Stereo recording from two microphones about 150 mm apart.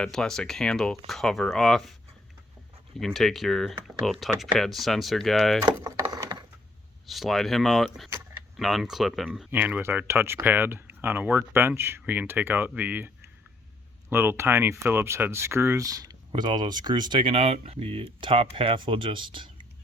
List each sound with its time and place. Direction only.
0.0 s speech: 5° left (ahead or behind)
3.0 s speech: centre (ahead or behind)
5.6 s typing: 25° right (ahead or behind)
7.1 s speech: centre (ahead or behind)
9.5 s speech: 10° right (ahead or behind)
14.1 s speech: 15° right (ahead or behind); by 19.6 s 35° right (ahead or behind)